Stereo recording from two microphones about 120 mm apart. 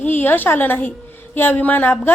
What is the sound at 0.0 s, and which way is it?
A woman's voice, 15° left (ahead or behind).